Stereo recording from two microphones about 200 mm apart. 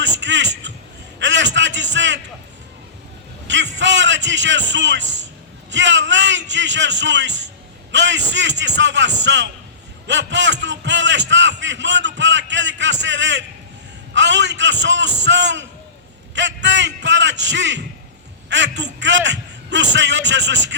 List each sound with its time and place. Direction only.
0.0 s a sound: 60° right (ahead or behind)
1.2 s a man's voice: 65° right (ahead or behind)
3.4 s vehicle: 65° right (ahead or behind)
3.8 s a man's voice: 65° right (ahead or behind)